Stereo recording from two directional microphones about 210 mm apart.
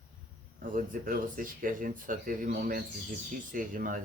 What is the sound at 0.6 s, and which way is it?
Speech, 40° right (ahead or behind).